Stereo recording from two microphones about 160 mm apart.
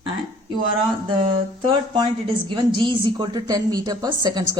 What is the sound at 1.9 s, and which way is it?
A woman's voice, 30° right (ahead or behind).